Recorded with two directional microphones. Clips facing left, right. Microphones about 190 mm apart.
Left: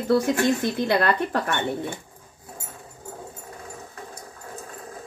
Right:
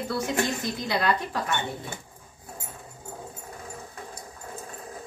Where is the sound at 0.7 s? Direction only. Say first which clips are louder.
Left 5 dB; 60° left (ahead or behind).